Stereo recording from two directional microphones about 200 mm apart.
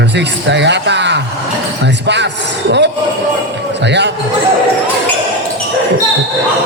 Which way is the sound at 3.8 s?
60° right (ahead or behind).